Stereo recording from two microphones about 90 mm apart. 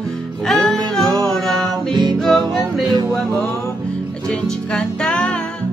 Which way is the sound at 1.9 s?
55° right (ahead or behind).